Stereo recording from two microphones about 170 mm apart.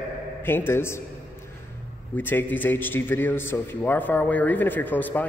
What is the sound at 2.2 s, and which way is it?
A man's voice, 10° left (ahead or behind).